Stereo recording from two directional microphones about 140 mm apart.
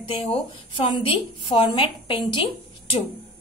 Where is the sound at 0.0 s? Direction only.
45° left (ahead or behind).